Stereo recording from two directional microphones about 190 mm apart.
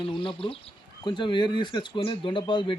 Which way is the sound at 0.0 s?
25° left (ahead or behind).